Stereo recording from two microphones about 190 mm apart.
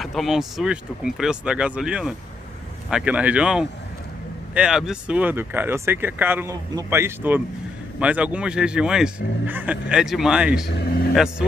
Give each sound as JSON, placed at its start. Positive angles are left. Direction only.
{"t": 0.0, "sound": "speech", "side_deg": 0}
{"t": 10.8, "sound": "speech", "side_deg": 55}
{"t": 11.1, "sound": "speech", "side_deg": -5}